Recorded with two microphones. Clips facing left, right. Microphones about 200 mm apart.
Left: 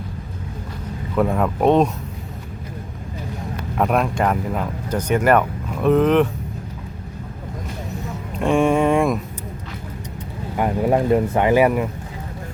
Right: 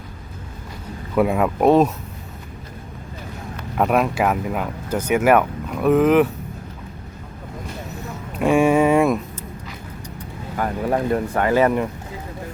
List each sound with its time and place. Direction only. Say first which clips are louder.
1.1 s speech: right 1 dB; 10° right (ahead or behind)
3.8 s speech: right 1 dB; 5° right (ahead or behind)
8.4 s a sound: right 1 dB; 5° right (ahead or behind)
10.6 s speech: left 3 dB; 20° left (ahead or behind)